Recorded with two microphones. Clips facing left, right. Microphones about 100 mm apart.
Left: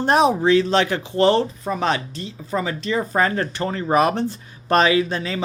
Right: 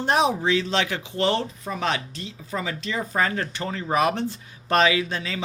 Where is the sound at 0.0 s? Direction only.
45° left (ahead or behind).